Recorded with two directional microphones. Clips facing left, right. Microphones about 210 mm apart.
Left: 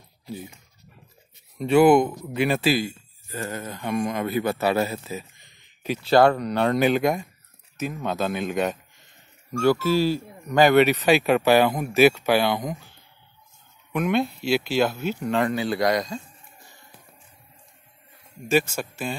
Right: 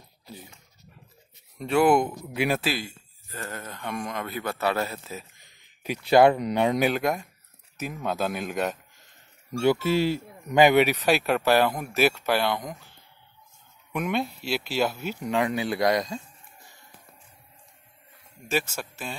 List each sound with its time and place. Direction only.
1.6 s speech: centre (ahead or behind)
2.7 s speech: 5° left (ahead or behind)
5.4 s speech: 10° right (ahead or behind)
9.6 s speech: 20° right (ahead or behind); by 12.7 s 5° left (ahead or behind)
13.9 s speech: 5° right (ahead or behind)
18.8 s speech: centre (ahead or behind)